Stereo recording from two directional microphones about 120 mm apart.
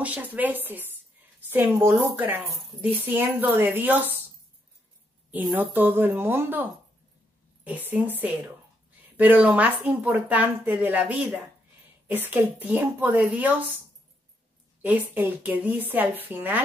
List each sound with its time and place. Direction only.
0.0 s speech: 15° right (ahead or behind)
3.1 s speech: 15° right (ahead or behind)
5.3 s speech: 15° right (ahead or behind)
14.8 s speech: 15° right (ahead or behind)